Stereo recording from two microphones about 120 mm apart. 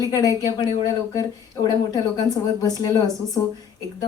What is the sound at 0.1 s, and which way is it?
Speech, 30° left (ahead or behind).